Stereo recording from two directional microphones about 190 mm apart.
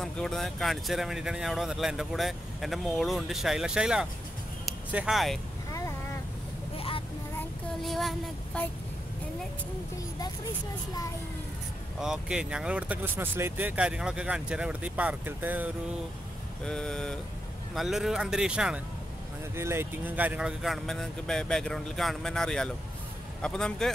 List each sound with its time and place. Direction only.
0.0 s speech: 5° left (ahead or behind)
5.7 s a sound: 15° left (ahead or behind)
7.8 s speech: centre (ahead or behind)
12.0 s speech: 5° right (ahead or behind)
16.6 s speech: 5° left (ahead or behind)